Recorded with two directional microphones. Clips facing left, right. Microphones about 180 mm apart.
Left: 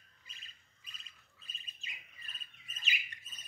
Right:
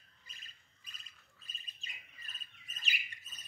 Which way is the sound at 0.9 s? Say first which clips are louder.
Even; 40° right (ahead or behind).